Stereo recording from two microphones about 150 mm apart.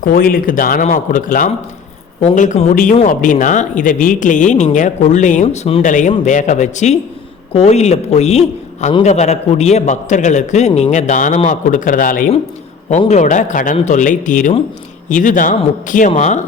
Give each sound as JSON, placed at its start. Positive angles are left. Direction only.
{"t": 0.0, "sound": "speech", "side_deg": 70}
{"t": 5.8, "sound": "a man's voice", "side_deg": 55}
{"t": 13.1, "sound": "speech", "side_deg": 55}